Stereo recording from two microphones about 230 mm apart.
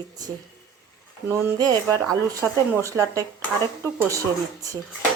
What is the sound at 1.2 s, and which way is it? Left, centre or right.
Speech, centre.